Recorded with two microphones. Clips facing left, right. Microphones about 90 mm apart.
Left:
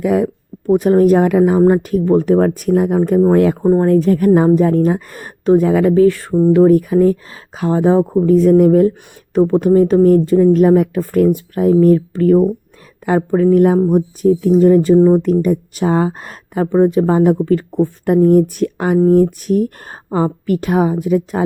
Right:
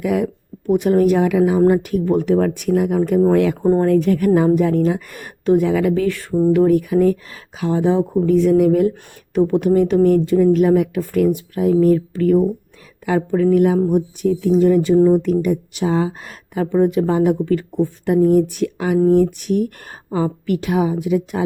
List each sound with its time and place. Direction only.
0.0 s speech: 35° left (ahead or behind)